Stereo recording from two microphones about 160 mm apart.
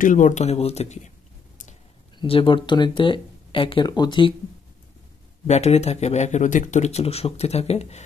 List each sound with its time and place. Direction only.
0.0 s speech: 55° left (ahead or behind)
2.1 s speech: 35° left (ahead or behind)
5.5 s speech: 45° left (ahead or behind)